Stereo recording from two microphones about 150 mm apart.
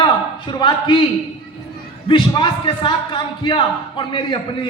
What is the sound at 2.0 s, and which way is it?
A man's voice, 35° left (ahead or behind).